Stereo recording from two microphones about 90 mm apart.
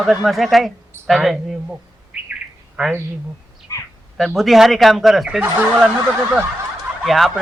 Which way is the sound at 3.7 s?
35° left (ahead or behind).